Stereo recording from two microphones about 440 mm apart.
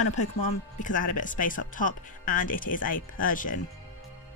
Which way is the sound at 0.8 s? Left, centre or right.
Centre.